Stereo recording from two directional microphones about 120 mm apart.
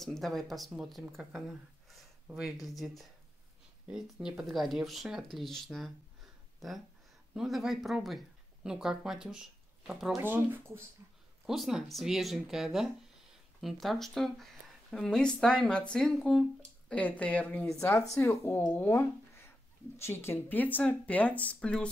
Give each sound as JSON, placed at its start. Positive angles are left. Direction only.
{"t": 0.0, "sound": "speech", "side_deg": 0}
{"t": 7.3, "sound": "speech", "side_deg": -5}
{"t": 10.2, "sound": "speech", "side_deg": -15}
{"t": 11.4, "sound": "speech", "side_deg": 0}
{"t": 18.2, "sound": "speech", "side_deg": 25}